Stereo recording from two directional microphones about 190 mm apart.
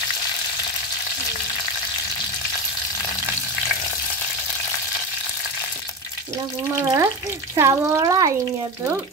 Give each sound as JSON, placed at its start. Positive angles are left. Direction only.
{"t": 6.8, "sound": "speech", "side_deg": -15}